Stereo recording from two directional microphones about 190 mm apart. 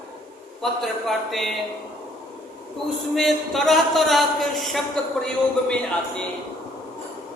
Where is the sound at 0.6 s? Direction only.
Centre (ahead or behind).